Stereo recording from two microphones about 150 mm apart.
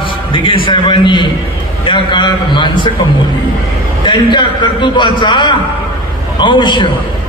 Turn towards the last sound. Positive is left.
turn(degrees=30)  # may be behind; listen again after turning